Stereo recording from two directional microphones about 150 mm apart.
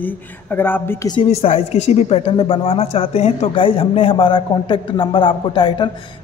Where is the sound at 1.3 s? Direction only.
45° left (ahead or behind).